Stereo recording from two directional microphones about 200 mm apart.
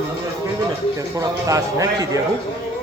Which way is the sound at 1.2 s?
15° right (ahead or behind).